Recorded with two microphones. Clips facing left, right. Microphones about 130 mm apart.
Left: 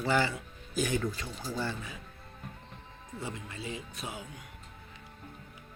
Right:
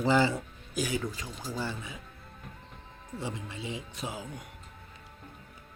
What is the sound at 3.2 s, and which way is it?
Speech, 25° right (ahead or behind).